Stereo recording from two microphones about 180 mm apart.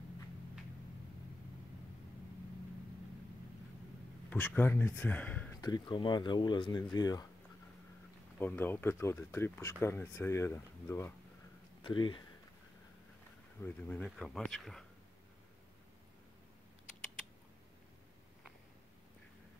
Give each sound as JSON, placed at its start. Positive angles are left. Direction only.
{"t": 4.3, "sound": "speech", "side_deg": 10}
{"t": 5.6, "sound": "speech", "side_deg": 25}
{"t": 8.4, "sound": "speech", "side_deg": 10}
{"t": 11.8, "sound": "speech", "side_deg": 25}
{"t": 13.6, "sound": "speech", "side_deg": 10}